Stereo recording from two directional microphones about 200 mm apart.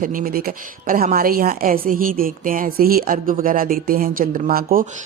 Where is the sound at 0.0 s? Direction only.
45° right (ahead or behind).